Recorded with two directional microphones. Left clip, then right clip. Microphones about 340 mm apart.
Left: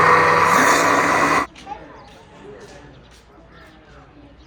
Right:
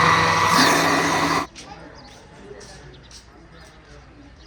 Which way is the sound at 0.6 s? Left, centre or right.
Centre.